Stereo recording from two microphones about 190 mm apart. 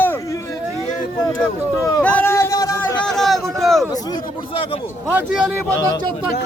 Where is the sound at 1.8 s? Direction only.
10° left (ahead or behind).